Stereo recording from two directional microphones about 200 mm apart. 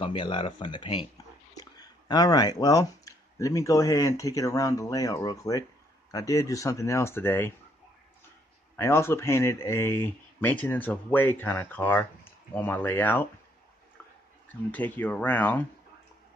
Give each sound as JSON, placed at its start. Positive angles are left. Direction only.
{"t": 0.0, "sound": "speech", "side_deg": 25}
{"t": 8.7, "sound": "speech", "side_deg": 10}
{"t": 14.7, "sound": "speech", "side_deg": 10}